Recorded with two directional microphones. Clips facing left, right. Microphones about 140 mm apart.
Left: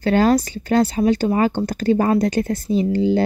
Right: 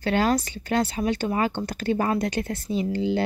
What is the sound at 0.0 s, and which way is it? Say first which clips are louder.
Speech: left 6 dB; 40° left (ahead or behind).